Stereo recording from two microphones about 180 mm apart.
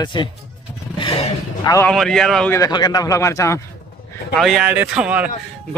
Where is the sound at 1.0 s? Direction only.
30° left (ahead or behind).